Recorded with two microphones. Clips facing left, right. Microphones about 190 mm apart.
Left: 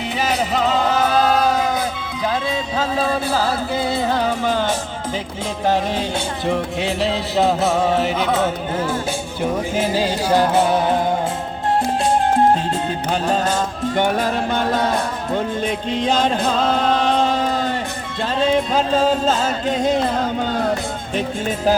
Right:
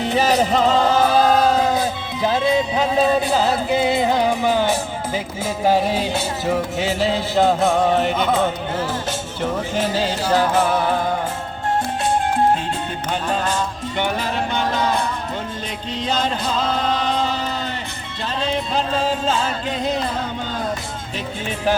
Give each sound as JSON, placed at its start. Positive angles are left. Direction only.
{"t": 0.0, "sound": "music", "side_deg": -40}
{"t": 13.1, "sound": "music", "side_deg": 40}
{"t": 21.2, "sound": "speech", "side_deg": 40}